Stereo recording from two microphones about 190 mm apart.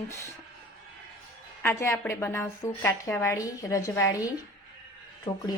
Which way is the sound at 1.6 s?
15° left (ahead or behind).